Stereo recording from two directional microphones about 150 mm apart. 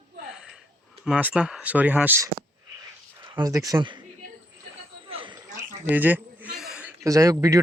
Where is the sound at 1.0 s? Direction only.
5° right (ahead or behind).